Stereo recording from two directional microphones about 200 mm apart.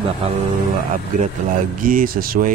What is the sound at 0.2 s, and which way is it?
Speech, 30° right (ahead or behind).